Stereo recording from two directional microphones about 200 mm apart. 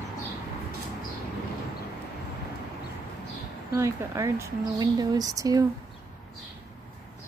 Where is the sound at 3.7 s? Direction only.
15° right (ahead or behind).